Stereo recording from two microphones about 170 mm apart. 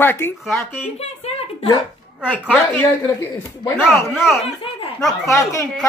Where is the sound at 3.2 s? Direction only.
15° left (ahead or behind).